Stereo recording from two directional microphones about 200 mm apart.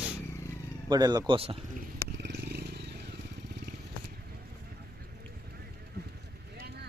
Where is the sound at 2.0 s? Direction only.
55° right (ahead or behind).